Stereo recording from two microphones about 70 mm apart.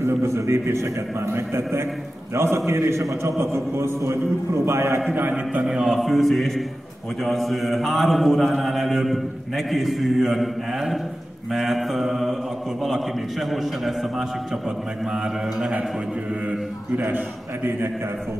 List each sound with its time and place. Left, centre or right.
0.0 s a man's voice: right
5.7 s mantra: centre